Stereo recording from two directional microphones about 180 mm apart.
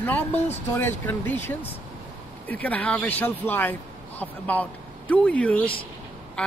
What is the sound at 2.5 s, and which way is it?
Speech, 10° left (ahead or behind).